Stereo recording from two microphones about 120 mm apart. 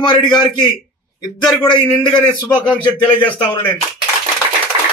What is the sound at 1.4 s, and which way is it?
Speech, 40° left (ahead or behind).